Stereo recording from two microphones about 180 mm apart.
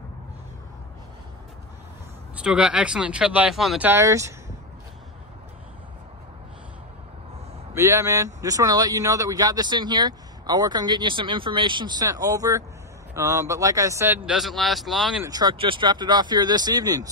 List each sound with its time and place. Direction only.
2.3 s speech: 5° right (ahead or behind)
7.7 s speech: 15° right (ahead or behind); by 15.2 s centre (ahead or behind)
15.2 s speech: 20° right (ahead or behind)